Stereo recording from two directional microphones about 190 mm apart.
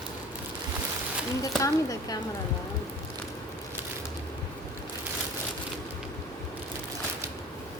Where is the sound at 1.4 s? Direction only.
20° left (ahead or behind).